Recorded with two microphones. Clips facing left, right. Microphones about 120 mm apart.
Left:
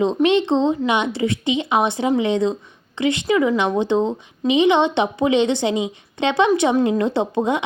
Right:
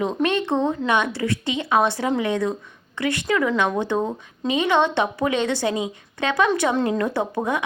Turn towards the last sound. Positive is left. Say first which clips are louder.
# left 4 dB
turn(degrees=20)  # may be behind; listen again after turning